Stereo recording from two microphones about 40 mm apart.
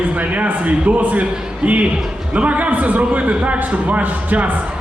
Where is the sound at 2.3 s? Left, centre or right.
Right.